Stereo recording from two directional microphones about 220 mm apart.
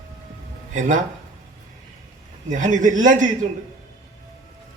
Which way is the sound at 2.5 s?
35° right (ahead or behind).